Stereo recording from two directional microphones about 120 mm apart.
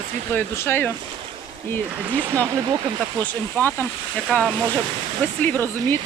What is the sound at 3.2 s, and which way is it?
Speech, 15° left (ahead or behind).